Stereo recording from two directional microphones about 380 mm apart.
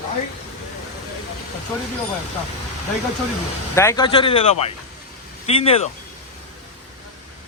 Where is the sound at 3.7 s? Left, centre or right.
Centre.